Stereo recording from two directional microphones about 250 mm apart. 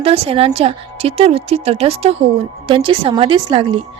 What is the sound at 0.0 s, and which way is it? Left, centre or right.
Speech, right.